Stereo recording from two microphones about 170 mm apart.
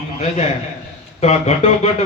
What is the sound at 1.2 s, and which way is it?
Speech, 40° left (ahead or behind).